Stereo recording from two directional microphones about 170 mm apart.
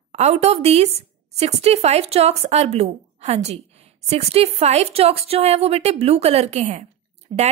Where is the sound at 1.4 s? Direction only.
40° right (ahead or behind).